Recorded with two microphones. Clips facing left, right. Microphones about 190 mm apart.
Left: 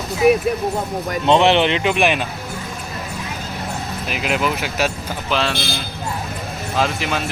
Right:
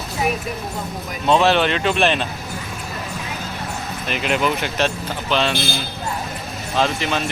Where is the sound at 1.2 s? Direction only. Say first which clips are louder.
Left 1 dB; 20° left (ahead or behind).